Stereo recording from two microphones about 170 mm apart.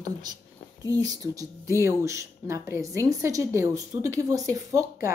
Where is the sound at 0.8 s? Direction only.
20° right (ahead or behind).